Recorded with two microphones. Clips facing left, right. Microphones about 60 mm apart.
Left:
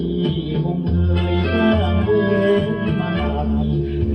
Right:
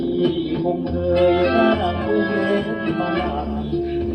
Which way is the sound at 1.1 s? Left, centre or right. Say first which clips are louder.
Right 8 dB; right.